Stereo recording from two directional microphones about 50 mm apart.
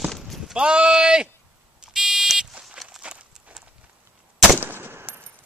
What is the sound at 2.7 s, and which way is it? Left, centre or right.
Walk, centre.